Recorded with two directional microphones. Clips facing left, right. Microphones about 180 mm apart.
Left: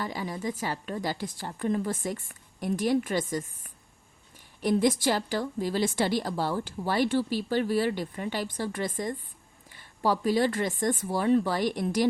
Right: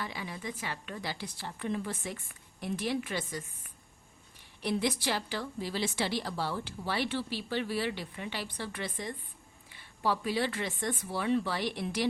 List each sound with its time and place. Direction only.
0.0 s a woman's voice: 40° left (ahead or behind)